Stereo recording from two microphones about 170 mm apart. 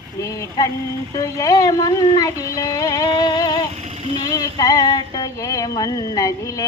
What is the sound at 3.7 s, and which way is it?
Vehicle, 40° right (ahead or behind).